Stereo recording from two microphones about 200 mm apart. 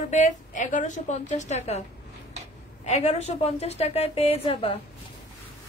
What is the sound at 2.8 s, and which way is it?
A woman's voice, 35° left (ahead or behind).